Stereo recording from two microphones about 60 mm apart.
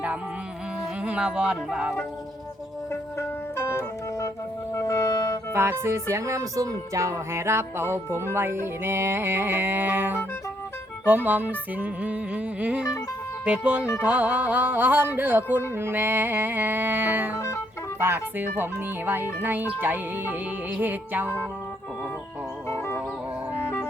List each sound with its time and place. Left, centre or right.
1.0 s speech: centre
3.2 s music: left
5.5 s speech: right
11.0 s music: right